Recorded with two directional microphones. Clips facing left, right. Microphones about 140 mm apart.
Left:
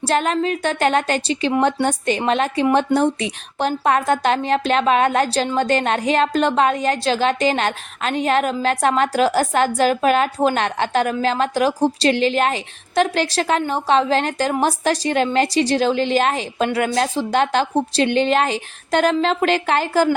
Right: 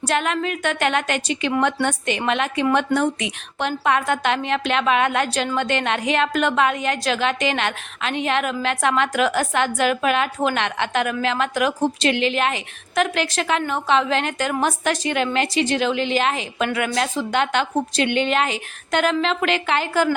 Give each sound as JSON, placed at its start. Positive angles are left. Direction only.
{"t": 0.0, "sound": "a woman's voice", "side_deg": 35}